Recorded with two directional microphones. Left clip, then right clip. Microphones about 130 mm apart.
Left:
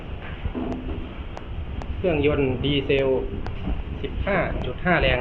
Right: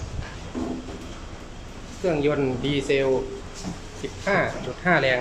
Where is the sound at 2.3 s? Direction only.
30° right (ahead or behind).